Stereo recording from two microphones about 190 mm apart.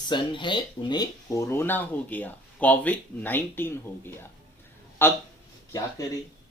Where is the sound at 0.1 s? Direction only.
25° left (ahead or behind).